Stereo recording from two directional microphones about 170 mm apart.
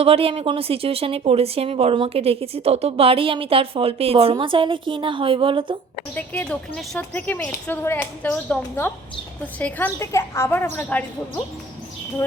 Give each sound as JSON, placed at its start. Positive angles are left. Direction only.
{"t": 0.0, "sound": "speech", "side_deg": -35}
{"t": 6.1, "sound": "a woman's voice", "side_deg": 10}